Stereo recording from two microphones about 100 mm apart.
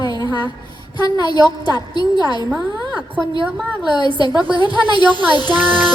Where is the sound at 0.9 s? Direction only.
45° left (ahead or behind).